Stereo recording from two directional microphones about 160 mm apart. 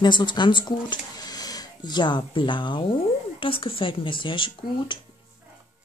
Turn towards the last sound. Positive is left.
turn(degrees=30)  # may be behind; listen again after turning